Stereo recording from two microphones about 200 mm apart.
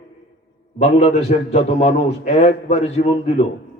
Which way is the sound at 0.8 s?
30° left (ahead or behind).